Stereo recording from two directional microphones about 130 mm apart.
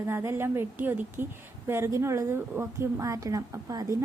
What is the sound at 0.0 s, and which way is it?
A woman's voice, 20° right (ahead or behind).